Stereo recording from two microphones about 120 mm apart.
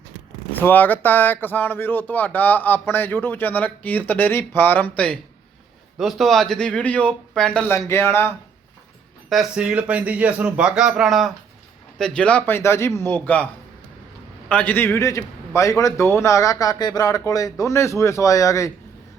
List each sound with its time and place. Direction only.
0.5 s speech: 15° left (ahead or behind)
7.7 s a man's voice: 20° left (ahead or behind)
9.3 s speech: 5° right (ahead or behind); by 13.5 s 15° left (ahead or behind)
14.5 s a man's voice: 15° left (ahead or behind)